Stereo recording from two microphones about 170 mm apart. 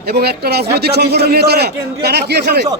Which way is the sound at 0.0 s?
70° right (ahead or behind).